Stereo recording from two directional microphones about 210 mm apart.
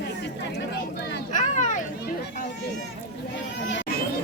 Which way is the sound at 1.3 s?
35° left (ahead or behind).